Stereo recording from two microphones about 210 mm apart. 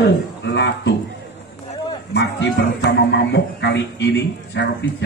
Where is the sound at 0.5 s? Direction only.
55° left (ahead or behind).